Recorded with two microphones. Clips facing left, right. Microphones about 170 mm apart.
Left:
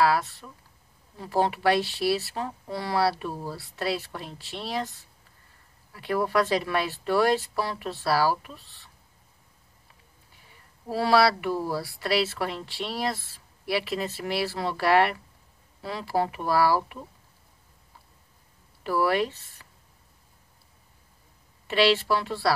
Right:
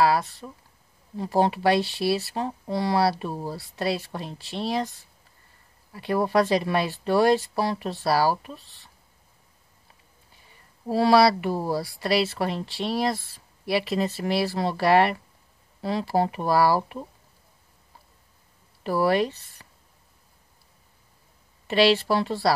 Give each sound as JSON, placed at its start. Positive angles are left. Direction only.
{"t": 0.4, "sound": "speech", "side_deg": -20}
{"t": 6.0, "sound": "speech", "side_deg": -25}
{"t": 7.9, "sound": "speech", "side_deg": -20}
{"t": 10.9, "sound": "speech", "side_deg": -20}
{"t": 14.4, "sound": "speech", "side_deg": -20}
{"t": 18.9, "sound": "speech", "side_deg": -25}
{"t": 21.6, "sound": "speech", "side_deg": -35}